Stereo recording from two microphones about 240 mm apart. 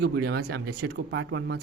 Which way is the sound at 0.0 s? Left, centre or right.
Right.